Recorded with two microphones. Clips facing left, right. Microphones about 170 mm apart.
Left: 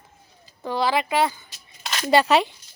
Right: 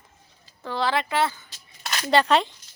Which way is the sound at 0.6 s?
10° left (ahead or behind).